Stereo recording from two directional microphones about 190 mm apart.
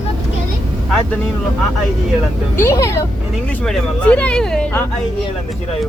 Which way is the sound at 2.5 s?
15° left (ahead or behind).